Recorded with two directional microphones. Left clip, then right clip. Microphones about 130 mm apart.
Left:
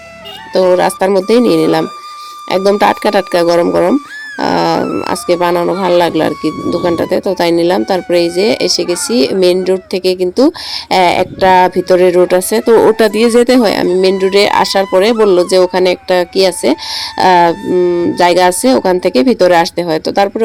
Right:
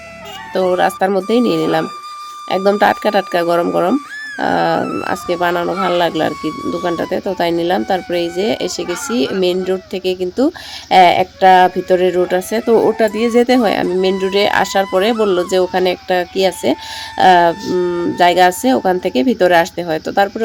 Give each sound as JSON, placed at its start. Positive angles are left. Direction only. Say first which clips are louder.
{"t": 0.5, "sound": "speech", "louder": "left 5 dB", "side_deg": 30}
{"t": 4.8, "sound": "speech", "louder": "left 4 dB", "side_deg": 0}
{"t": 5.3, "sound": "speech", "louder": "left 5 dB", "side_deg": 35}
{"t": 13.3, "sound": "speech", "louder": "left 4 dB", "side_deg": 30}
{"t": 17.7, "sound": "speech", "louder": "left 6 dB", "side_deg": 0}
{"t": 18.2, "sound": "speech", "louder": "left 1 dB", "side_deg": 35}